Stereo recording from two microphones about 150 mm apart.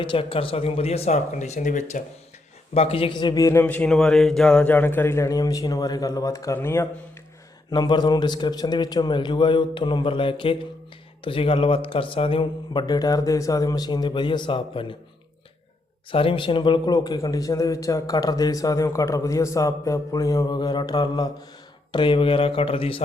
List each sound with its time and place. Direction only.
0.0 s speech: 35° left (ahead or behind); by 2.0 s 55° left (ahead or behind)
2.7 s a man's voice: 40° left (ahead or behind); by 6.8 s 15° left (ahead or behind)
7.7 s speech: 30° left (ahead or behind)
16.1 s a man's voice: 35° left (ahead or behind)